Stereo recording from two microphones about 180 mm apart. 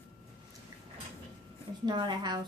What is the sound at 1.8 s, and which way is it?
Speech, 25° right (ahead or behind).